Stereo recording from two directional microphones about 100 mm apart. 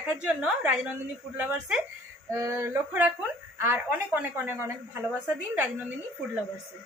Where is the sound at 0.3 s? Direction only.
10° right (ahead or behind).